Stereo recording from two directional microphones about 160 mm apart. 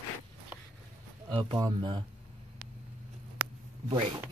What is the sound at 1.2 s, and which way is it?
Speech, 30° right (ahead or behind).